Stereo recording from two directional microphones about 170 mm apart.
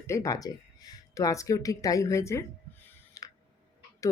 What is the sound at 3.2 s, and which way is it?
Tick, 20° left (ahead or behind).